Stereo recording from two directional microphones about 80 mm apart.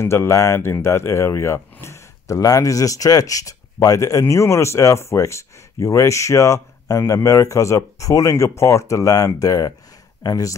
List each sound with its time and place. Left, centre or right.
0.0 s speech: left